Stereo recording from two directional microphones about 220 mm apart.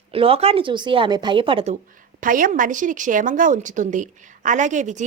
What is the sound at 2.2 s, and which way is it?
A woman's voice, 40° right (ahead or behind).